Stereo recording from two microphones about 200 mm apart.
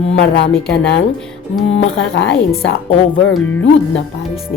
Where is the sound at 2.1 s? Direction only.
60° left (ahead or behind).